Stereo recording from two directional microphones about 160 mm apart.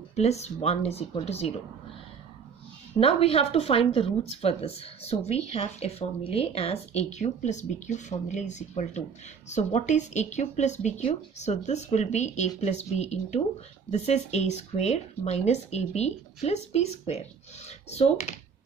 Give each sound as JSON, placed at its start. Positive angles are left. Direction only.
{"t": 0.1, "sound": "speech", "side_deg": 45}
{"t": 3.0, "sound": "speech", "side_deg": 35}